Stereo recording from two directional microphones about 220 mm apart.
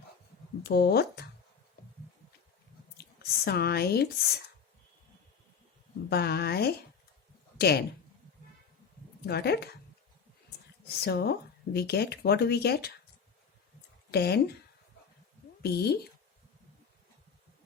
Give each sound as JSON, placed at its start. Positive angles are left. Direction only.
{"t": 0.6, "sound": "speech", "side_deg": 45}
{"t": 3.0, "sound": "a sound", "side_deg": 45}
{"t": 6.1, "sound": "speech", "side_deg": 45}
{"t": 9.2, "sound": "speech", "side_deg": 45}
{"t": 11.0, "sound": "speech", "side_deg": 45}
{"t": 14.1, "sound": "speech", "side_deg": 45}
{"t": 15.6, "sound": "speech", "side_deg": 45}